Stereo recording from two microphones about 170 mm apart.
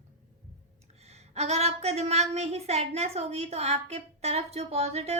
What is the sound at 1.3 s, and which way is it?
A woman's voice, 40° right (ahead or behind).